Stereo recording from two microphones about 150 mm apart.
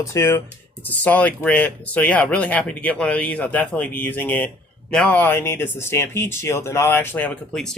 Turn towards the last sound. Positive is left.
turn(degrees=5)  # may be behind; listen again after turning